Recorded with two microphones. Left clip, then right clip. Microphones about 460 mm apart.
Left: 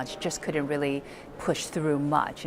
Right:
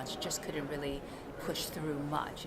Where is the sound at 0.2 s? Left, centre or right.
Left.